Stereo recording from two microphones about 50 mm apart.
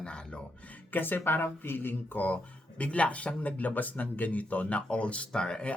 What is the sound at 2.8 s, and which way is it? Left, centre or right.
Speech, left.